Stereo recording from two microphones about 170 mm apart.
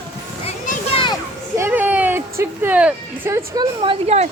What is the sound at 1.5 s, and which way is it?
Speech, 15° right (ahead or behind).